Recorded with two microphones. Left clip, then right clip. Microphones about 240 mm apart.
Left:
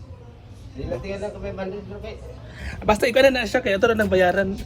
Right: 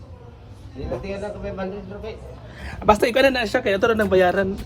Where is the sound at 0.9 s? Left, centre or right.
Right.